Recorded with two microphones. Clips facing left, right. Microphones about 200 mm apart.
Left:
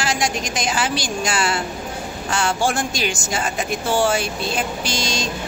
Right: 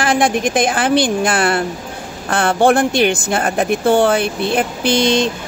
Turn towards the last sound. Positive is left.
turn(degrees=-60)  # may be behind; listen again after turning